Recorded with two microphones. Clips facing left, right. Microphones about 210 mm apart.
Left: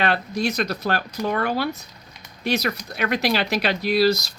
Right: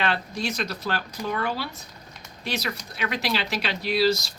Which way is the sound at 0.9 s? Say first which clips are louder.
Left 4 dB; 60° left (ahead or behind).